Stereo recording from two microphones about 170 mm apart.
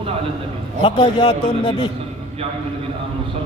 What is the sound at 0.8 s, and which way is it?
A man's voice, 30° left (ahead or behind).